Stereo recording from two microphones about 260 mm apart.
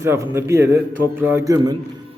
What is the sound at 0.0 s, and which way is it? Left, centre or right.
A man's voice, centre.